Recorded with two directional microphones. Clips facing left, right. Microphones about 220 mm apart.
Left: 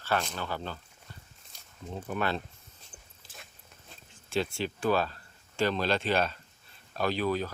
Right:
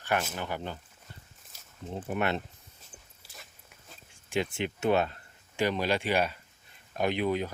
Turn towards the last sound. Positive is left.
turn(degrees=-20)  # may be behind; listen again after turning